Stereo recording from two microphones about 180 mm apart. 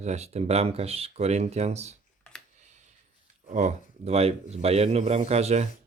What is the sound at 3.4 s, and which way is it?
Speech, 40° right (ahead or behind).